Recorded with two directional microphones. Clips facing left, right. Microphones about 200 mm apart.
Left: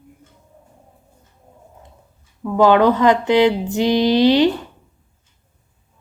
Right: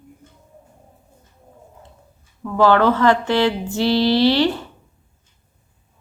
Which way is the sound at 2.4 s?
15° left (ahead or behind).